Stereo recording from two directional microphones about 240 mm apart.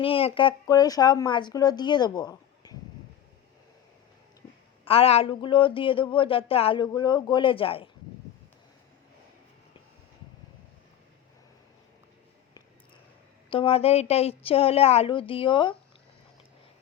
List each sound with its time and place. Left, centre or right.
0.0 s speech: left
4.9 s speech: left
13.5 s speech: left